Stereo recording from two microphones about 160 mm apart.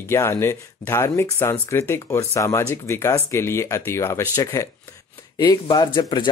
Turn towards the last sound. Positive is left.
turn(degrees=25)  # may be behind; listen again after turning